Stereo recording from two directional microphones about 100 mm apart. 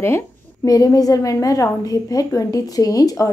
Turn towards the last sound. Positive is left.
turn(degrees=35)  # may be behind; listen again after turning